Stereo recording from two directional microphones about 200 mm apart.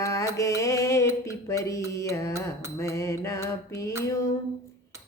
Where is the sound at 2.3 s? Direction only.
15° right (ahead or behind).